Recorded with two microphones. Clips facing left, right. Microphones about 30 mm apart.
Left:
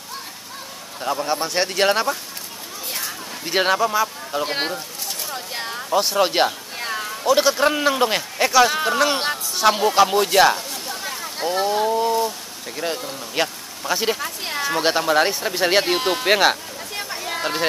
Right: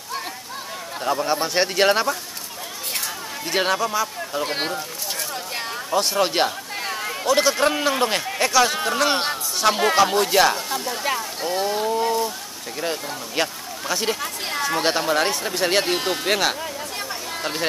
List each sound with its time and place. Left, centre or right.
1.0 s speech: centre
3.4 s speech: centre
5.3 s a sound: centre
7.2 s speech: centre
9.2 s a sound: centre
10.1 s speech: centre
17.3 s chatter: centre